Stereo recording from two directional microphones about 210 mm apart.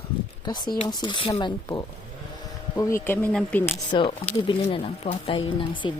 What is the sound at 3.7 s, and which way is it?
Speech, 25° left (ahead or behind).